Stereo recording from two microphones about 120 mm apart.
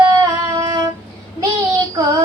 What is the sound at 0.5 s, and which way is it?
Female singing, 30° right (ahead or behind).